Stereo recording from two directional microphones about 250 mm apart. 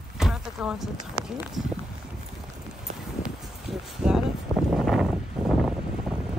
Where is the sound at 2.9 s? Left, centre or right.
Right.